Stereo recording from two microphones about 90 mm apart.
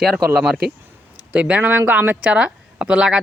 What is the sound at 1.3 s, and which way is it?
Speech, 15° right (ahead or behind).